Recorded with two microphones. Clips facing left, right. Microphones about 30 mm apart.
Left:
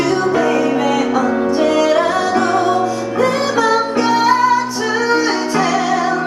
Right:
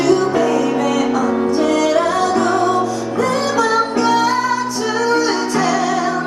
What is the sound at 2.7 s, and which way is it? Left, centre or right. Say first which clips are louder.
Music: left 2 dB; centre.